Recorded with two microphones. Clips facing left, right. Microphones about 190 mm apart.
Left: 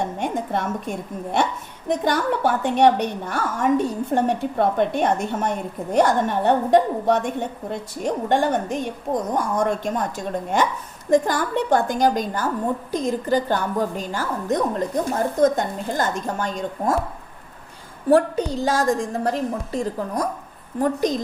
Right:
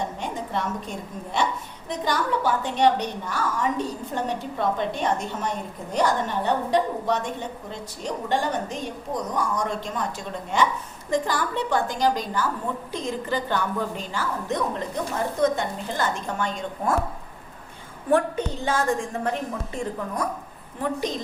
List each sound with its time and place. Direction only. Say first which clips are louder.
0.2 s a woman's voice: left 5 dB; 55° left (ahead or behind)
18.1 s a woman's voice: left 5 dB; 40° left (ahead or behind)